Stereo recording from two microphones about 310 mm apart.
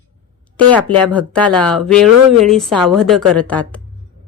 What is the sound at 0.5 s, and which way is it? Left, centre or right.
Speech, centre.